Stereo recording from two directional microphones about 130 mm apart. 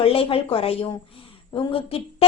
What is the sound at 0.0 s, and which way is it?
A woman's voice, 45° left (ahead or behind).